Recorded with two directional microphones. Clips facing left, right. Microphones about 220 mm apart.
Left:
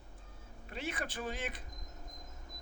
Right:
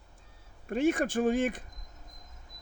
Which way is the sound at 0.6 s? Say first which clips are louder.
Right 14 dB; 50° right (ahead or behind).